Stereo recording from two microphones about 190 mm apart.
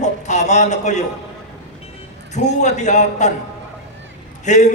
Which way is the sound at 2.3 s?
40° left (ahead or behind).